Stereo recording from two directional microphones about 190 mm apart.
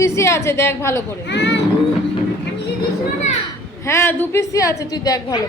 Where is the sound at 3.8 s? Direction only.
15° left (ahead or behind).